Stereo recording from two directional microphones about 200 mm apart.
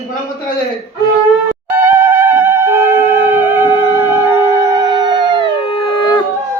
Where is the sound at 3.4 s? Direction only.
25° left (ahead or behind).